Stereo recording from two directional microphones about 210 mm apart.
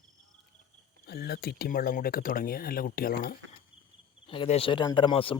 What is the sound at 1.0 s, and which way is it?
Speech, 45° left (ahead or behind).